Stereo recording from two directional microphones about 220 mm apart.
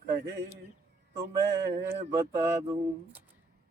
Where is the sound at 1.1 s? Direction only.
50° right (ahead or behind).